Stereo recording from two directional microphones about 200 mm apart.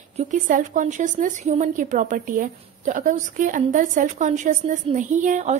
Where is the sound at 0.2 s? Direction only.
40° right (ahead or behind).